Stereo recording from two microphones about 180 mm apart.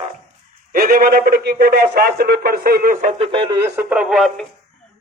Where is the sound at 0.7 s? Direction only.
50° right (ahead or behind).